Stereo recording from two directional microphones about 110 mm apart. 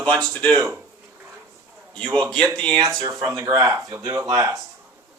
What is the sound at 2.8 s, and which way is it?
Speech, 30° right (ahead or behind).